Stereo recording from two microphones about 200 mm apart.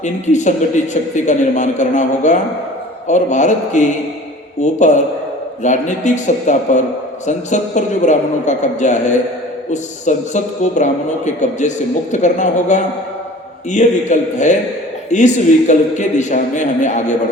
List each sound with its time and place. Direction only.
0.0 s a man's voice: 35° left (ahead or behind)